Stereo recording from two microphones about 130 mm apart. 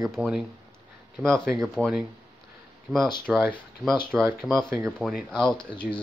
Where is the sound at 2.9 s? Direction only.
15° right (ahead or behind).